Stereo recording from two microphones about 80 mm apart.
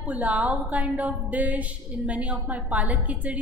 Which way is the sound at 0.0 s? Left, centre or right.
Centre.